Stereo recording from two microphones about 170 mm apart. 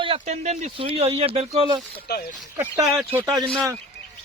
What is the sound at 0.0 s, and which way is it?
Speech, 35° right (ahead or behind).